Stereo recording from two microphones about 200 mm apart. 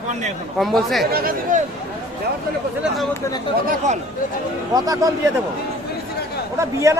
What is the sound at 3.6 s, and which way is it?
Speech, 35° right (ahead or behind).